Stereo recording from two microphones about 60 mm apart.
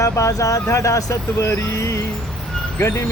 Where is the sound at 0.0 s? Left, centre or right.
Left.